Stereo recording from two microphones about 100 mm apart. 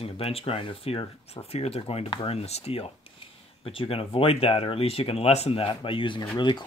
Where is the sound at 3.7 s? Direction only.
65° left (ahead or behind).